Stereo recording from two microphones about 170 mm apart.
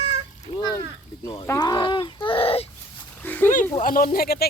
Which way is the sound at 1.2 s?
20° left (ahead or behind).